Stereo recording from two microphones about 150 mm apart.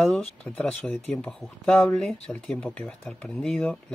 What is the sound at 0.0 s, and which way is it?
Speech, 10° left (ahead or behind).